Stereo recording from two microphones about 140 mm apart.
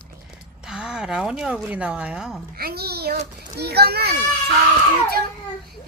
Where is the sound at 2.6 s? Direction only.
90° right.